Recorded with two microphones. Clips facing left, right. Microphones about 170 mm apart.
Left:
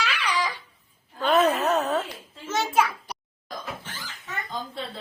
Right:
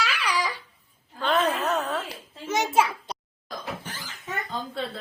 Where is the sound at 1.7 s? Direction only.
30° left (ahead or behind).